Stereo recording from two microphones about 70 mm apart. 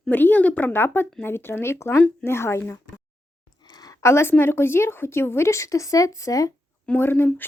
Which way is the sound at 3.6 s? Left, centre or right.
Left.